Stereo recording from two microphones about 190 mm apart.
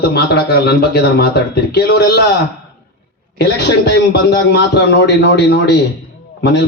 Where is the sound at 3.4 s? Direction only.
60° left (ahead or behind).